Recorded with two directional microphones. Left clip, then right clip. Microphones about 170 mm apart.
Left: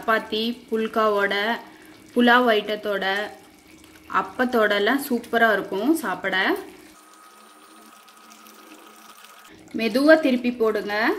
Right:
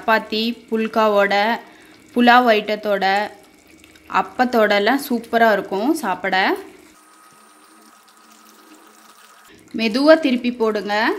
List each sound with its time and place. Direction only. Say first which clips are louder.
0.0 s speech: right 4 dB; 45° right (ahead or behind)
9.8 s speech: right 3 dB; 45° right (ahead or behind)